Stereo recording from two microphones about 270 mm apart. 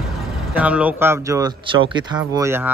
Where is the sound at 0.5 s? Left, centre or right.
Centre.